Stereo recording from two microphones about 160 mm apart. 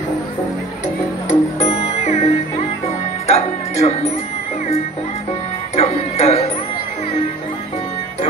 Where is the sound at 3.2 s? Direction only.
40° left (ahead or behind).